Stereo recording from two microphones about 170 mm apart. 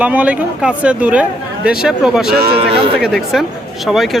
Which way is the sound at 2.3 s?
65° right (ahead or behind).